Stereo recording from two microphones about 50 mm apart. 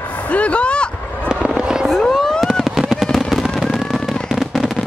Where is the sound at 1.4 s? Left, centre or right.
Right.